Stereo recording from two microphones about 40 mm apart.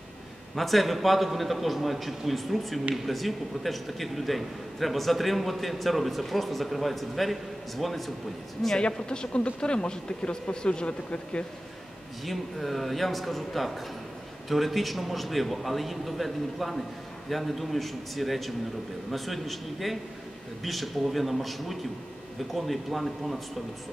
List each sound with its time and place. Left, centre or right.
0.6 s a man's voice: centre
8.7 s speech: left
12.3 s a man's voice: centre